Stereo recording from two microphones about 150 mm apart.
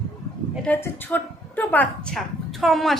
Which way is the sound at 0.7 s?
15° left (ahead or behind).